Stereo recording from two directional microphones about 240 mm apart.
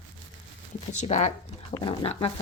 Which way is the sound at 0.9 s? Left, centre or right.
Left.